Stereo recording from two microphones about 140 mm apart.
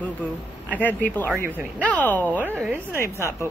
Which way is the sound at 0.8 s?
15° left (ahead or behind).